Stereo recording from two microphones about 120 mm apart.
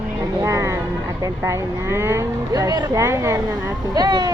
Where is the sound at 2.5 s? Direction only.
30° right (ahead or behind).